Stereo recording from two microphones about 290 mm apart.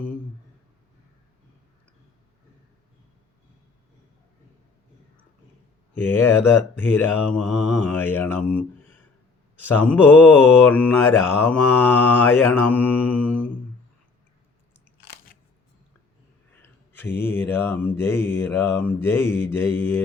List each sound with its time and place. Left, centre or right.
5.9 s mantra: centre
9.6 s mantra: centre
15.0 s biting: left
16.6 s a sound: centre
17.2 s mantra: centre